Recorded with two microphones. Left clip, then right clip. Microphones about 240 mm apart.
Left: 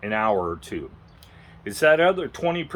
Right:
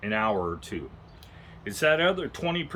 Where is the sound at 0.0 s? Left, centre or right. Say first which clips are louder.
Left 4 dB; centre.